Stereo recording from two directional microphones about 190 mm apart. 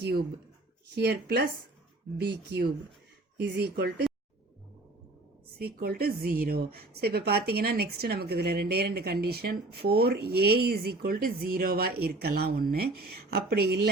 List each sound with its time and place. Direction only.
0.0 s a woman's voice: 55° right (ahead or behind)
5.5 s a woman's voice: 55° right (ahead or behind)